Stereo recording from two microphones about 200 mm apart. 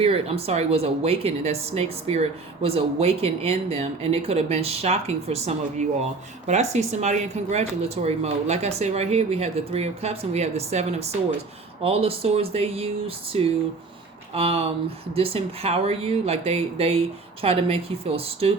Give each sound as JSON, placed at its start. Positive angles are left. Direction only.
{"t": 0.0, "sound": "speech", "side_deg": -30}